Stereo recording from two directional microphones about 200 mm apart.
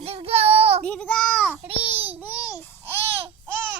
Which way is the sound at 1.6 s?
25° right (ahead or behind).